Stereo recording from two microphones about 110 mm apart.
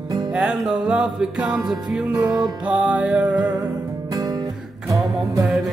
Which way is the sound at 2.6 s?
10° right (ahead or behind).